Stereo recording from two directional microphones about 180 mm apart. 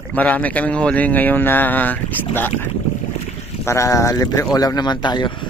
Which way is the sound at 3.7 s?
15° left (ahead or behind).